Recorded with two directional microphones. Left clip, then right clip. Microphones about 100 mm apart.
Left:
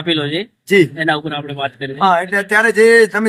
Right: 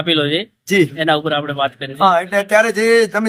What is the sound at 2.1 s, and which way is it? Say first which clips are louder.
Speech: even; 5° right (ahead or behind).